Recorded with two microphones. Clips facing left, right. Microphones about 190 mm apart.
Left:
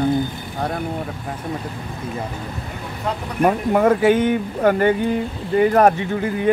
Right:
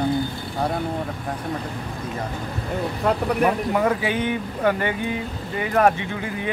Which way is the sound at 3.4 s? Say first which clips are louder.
Left 7 dB; 50° left (ahead or behind).